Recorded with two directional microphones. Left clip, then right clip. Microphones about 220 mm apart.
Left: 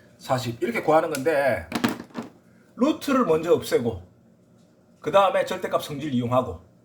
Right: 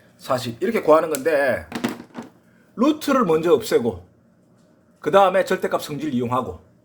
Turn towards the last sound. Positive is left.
turn(degrees=-40)  # may be behind; listen again after turning